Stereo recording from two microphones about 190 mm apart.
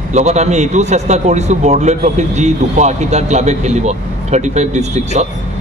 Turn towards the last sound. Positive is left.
turn(degrees=-35)  # may be behind; listen again after turning